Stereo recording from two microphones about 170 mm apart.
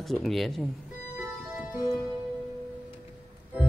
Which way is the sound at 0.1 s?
Centre (ahead or behind).